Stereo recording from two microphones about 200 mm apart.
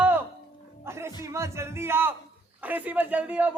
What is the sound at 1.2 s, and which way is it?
Speech, 15° right (ahead or behind).